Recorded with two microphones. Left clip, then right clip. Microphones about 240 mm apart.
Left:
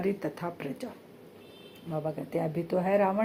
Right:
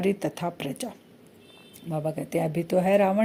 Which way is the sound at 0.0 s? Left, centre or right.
Right.